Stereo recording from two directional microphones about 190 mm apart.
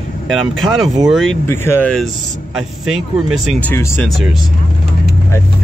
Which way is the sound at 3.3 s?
Centre (ahead or behind).